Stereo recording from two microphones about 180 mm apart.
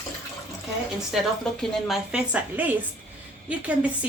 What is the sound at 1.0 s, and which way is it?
A woman's voice, centre (ahead or behind).